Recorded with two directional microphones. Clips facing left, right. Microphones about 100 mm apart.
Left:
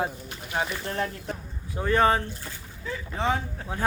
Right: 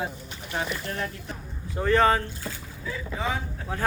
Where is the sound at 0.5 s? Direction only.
30° left (ahead or behind).